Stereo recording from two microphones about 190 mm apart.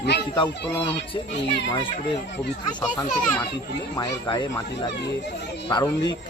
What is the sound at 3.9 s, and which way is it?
Speech, 25° left (ahead or behind).